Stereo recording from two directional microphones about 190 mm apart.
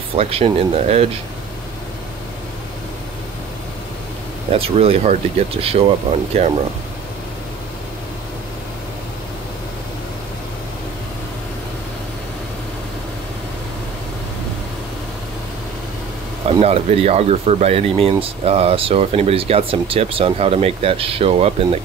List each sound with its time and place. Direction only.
0.1 s speech: 30° right (ahead or behind)
4.5 s speech: 30° right (ahead or behind)
16.4 s speech: 35° right (ahead or behind)